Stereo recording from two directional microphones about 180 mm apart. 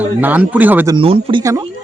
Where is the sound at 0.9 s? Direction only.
30° right (ahead or behind).